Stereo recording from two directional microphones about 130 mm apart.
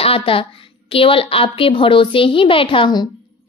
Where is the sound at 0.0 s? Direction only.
45° left (ahead or behind).